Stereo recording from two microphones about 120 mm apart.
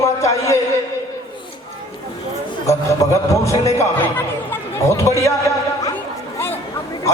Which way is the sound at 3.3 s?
25° left (ahead or behind).